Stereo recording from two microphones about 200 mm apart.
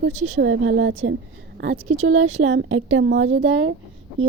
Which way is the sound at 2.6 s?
90° right.